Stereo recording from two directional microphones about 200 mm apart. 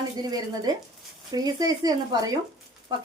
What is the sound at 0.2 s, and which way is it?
A woman's voice, 20° right (ahead or behind).